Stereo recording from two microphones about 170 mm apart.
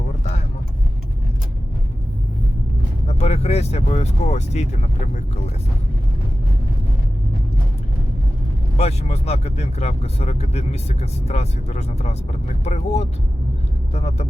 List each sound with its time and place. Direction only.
3.1 s speech: 40° left (ahead or behind)
8.8 s speech: 40° left (ahead or behind)